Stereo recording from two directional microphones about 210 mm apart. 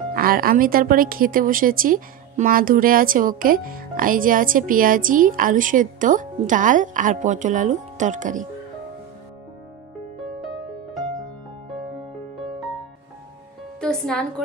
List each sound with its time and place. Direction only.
0.1 s speech: 45° right (ahead or behind)
13.7 s music: 5° left (ahead or behind)